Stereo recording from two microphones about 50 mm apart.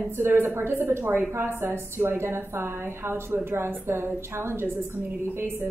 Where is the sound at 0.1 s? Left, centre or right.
Right.